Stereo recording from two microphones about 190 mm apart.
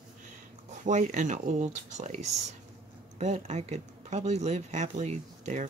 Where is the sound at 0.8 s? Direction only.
40° right (ahead or behind).